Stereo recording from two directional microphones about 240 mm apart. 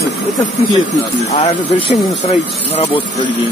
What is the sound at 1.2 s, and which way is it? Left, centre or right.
Speech, left.